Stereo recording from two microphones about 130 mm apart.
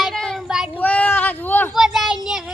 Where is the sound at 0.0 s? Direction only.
5° left (ahead or behind).